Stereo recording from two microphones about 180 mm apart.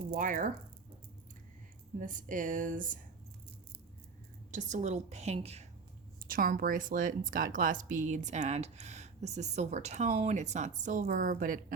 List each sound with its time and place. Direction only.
0.1 s speech: 50° right (ahead or behind)
2.0 s speech: 45° right (ahead or behind)
4.5 s a woman's voice: 40° right (ahead or behind)
6.2 s speech: 50° right (ahead or behind)